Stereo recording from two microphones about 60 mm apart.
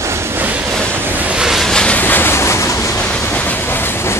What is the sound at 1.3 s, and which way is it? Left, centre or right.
Vehicle, centre.